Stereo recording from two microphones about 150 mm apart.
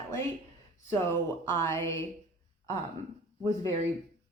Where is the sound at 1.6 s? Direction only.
15° left (ahead or behind).